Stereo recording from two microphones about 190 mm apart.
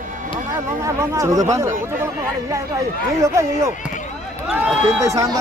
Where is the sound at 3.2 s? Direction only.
15° right (ahead or behind).